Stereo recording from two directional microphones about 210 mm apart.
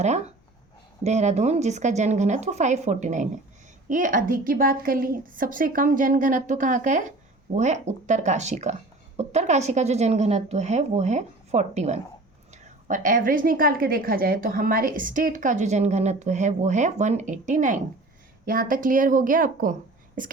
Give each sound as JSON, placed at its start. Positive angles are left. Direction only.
{"t": 0.0, "sound": "a woman's voice", "side_deg": -30}